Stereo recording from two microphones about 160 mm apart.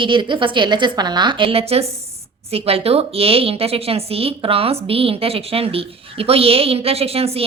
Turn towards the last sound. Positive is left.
turn(degrees=-40)  # may be behind; listen again after turning